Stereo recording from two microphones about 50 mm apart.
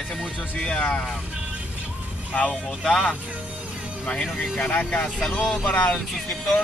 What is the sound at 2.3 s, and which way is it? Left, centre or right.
Speech, left.